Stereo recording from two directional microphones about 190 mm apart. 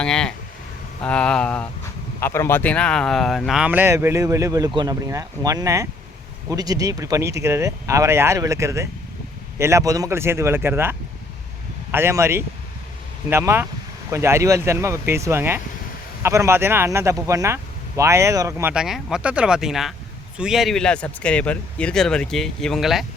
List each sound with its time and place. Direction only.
0.0 s speech: 5° left (ahead or behind)